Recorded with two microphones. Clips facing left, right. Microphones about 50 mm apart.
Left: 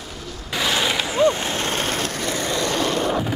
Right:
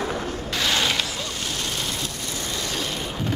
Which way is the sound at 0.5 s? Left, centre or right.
Centre.